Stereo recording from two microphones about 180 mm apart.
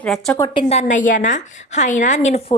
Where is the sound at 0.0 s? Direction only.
Centre (ahead or behind).